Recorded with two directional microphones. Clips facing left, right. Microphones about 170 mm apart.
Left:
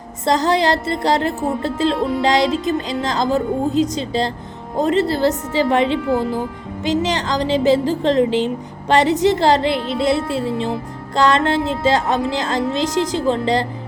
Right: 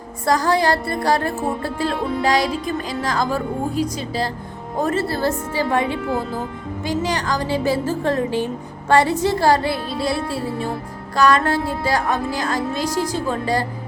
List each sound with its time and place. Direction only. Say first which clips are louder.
0.3 s a woman's voice: left 1 dB; 20° left (ahead or behind)